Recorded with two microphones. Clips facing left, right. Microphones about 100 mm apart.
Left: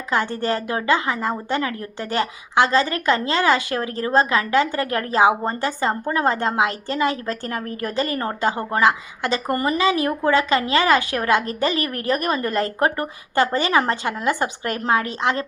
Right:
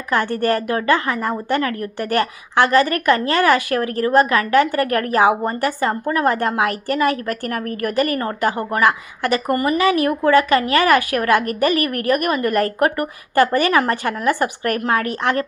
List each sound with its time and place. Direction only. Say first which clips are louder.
0.1 s a woman's voice: right 4 dB; 20° left (ahead or behind)